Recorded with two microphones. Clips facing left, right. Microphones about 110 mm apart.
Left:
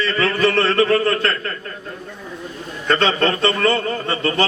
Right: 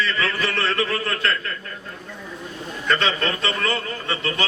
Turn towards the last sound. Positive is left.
turn(degrees=40)  # may be behind; listen again after turning